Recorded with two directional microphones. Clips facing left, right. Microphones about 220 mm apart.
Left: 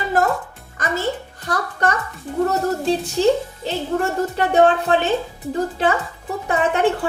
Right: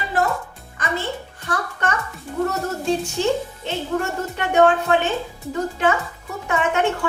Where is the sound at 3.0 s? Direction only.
35° left (ahead or behind).